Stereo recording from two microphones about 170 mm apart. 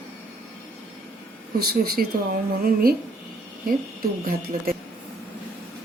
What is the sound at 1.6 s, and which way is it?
A woman's voice, 65° right (ahead or behind).